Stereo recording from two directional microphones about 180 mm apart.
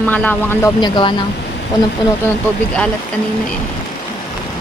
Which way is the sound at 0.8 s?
25° left (ahead or behind).